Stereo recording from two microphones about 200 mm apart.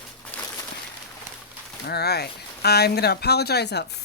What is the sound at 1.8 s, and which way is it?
Speech, 55° left (ahead or behind).